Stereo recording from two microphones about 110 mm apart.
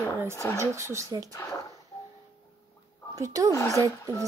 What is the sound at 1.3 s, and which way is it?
Speech, 25° left (ahead or behind).